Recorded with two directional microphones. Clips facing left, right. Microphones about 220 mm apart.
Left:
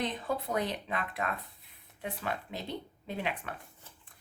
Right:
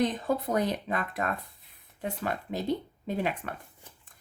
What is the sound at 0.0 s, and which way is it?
Speech, 45° right (ahead or behind).